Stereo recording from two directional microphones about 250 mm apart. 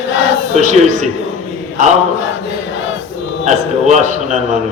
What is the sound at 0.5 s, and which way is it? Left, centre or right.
Speech, right.